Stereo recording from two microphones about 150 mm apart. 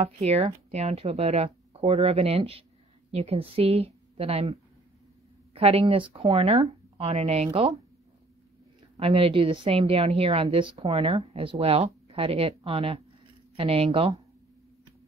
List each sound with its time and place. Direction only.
0.0 s a woman's voice: 45° right (ahead or behind)
8.9 s a woman's voice: 40° right (ahead or behind)